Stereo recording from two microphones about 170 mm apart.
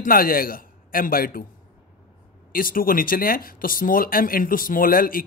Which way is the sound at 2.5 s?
55° left (ahead or behind).